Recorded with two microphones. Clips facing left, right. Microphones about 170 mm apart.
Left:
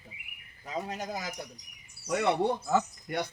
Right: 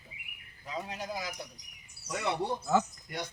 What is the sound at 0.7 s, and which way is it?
Speech, 45° left (ahead or behind).